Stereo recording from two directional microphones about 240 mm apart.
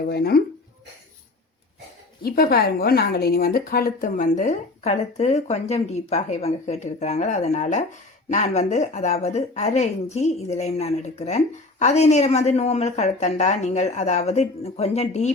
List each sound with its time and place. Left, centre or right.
0.1 s a woman's voice: left
2.2 s a woman's voice: left